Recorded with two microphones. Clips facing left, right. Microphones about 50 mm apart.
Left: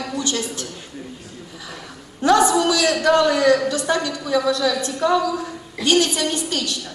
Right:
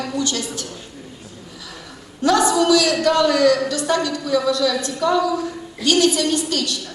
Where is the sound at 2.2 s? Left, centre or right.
Left.